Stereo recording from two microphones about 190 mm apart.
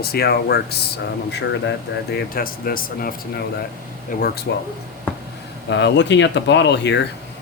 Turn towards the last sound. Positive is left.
turn(degrees=65)  # may be behind; listen again after turning